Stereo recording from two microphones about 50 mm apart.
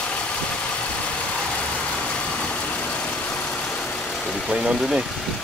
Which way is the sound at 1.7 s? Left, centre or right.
Left.